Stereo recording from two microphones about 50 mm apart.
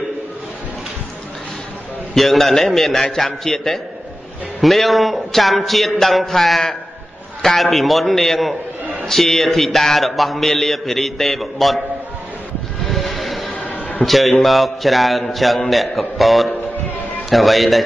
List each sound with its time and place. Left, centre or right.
2.1 s a man's voice: centre
12.8 s train: centre
13.2 s music: centre
13.6 s a sound: left
14.0 s a man's voice: centre